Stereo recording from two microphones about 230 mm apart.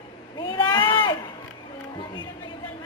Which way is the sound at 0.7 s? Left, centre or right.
Centre.